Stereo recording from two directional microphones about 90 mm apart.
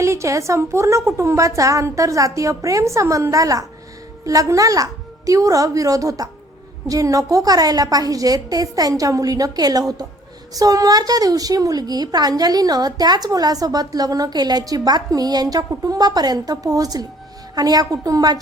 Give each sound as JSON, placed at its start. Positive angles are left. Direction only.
{"t": 0.0, "sound": "a woman's voice", "side_deg": -35}